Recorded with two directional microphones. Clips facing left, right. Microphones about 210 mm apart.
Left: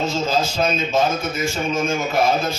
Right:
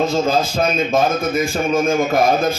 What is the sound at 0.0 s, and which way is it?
A man's voice, 55° right (ahead or behind).